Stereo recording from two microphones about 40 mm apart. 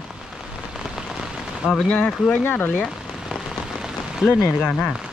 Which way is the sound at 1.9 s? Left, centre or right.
Left.